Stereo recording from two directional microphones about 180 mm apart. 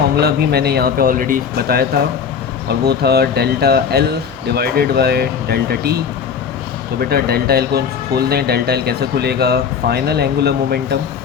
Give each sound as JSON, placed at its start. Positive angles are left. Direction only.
{"t": 0.2, "sound": "speech", "side_deg": -60}
{"t": 7.0, "sound": "speech", "side_deg": -60}